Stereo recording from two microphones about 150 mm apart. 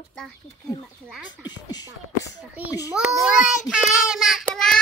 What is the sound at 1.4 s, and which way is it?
Speech, 25° left (ahead or behind).